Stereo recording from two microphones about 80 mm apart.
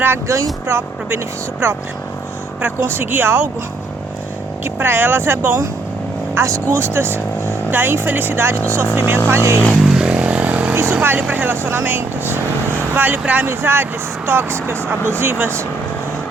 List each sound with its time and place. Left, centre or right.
0.0 s speech: right
2.6 s speech: right
4.6 s speech: right
9.9 s vehicle: centre
10.8 s speech: right